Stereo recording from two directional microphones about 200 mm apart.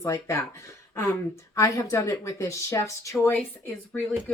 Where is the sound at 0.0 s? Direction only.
15° left (ahead or behind).